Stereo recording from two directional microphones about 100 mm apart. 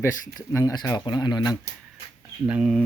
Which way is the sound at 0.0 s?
30° left (ahead or behind).